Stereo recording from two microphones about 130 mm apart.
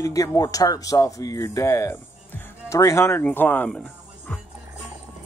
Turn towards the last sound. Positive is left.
turn(degrees=15)  # may be behind; listen again after turning